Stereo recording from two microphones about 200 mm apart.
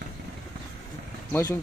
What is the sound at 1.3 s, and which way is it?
Speech, 15° left (ahead or behind).